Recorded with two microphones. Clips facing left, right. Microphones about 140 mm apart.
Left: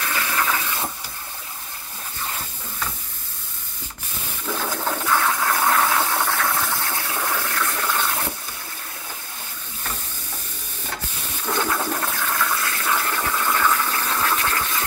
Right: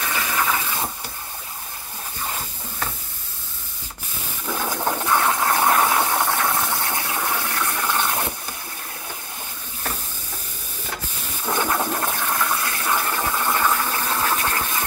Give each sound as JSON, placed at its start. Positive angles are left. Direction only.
{"t": 0.0, "sound": "a sound", "side_deg": -10}
{"t": 4.8, "sound": "water", "side_deg": -20}
{"t": 11.4, "sound": "toilet flush", "side_deg": -10}
{"t": 11.7, "sound": "toilet flush", "side_deg": -25}